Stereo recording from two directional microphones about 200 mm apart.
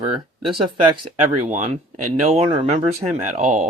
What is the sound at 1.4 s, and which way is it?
Speech, 40° right (ahead or behind).